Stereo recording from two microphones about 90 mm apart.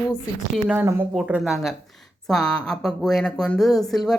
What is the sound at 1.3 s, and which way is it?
Speech, 5° right (ahead or behind).